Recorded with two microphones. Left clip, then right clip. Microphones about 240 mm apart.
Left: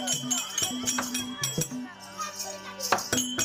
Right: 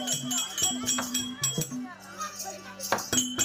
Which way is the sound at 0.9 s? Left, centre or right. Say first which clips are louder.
Even; centre.